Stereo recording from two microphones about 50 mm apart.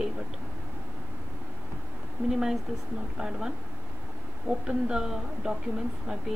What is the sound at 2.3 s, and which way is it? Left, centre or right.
A woman's voice, centre.